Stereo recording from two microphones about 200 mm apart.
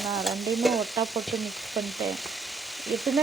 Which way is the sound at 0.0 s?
Centre (ahead or behind).